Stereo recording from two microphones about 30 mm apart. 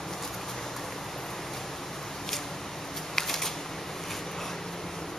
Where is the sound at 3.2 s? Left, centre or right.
Centre.